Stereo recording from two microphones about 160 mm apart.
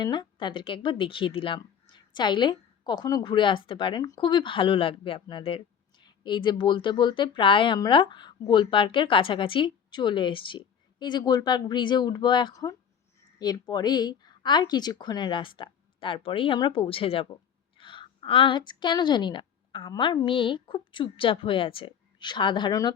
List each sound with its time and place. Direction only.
0.0 s a woman's voice: 30° left (ahead or behind)